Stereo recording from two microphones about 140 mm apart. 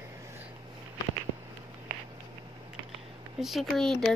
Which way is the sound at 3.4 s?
Centre (ahead or behind).